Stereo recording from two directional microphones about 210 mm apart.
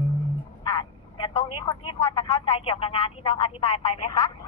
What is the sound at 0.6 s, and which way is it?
Telephone, 25° left (ahead or behind).